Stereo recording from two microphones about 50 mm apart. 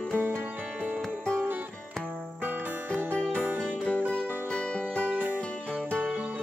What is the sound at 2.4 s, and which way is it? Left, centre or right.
Music, right.